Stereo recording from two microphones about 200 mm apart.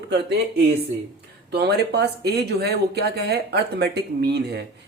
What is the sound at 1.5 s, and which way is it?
Speech, 55° right (ahead or behind).